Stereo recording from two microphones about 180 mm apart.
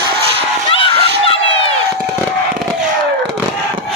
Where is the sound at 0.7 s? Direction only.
30° left (ahead or behind).